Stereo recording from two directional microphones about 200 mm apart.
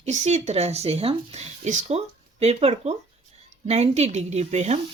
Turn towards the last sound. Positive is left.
turn(degrees=-35)  # may be behind; listen again after turning